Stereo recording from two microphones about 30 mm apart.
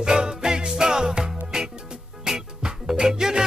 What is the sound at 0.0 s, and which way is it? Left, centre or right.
Music, right.